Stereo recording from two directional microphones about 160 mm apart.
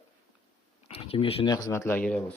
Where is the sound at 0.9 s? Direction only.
40° left (ahead or behind).